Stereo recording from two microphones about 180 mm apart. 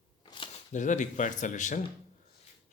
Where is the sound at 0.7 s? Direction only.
45° left (ahead or behind).